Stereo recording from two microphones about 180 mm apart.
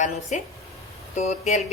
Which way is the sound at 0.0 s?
40° left (ahead or behind).